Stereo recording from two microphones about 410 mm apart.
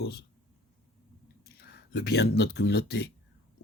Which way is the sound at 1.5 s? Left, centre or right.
Left.